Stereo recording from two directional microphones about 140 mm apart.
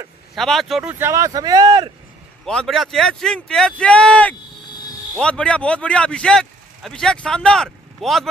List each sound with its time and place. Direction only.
0.3 s speech: centre (ahead or behind)
0.9 s speech: 20° right (ahead or behind)
2.4 s speech: 5° left (ahead or behind)